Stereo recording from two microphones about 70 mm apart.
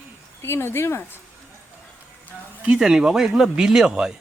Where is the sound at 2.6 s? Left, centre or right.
Centre.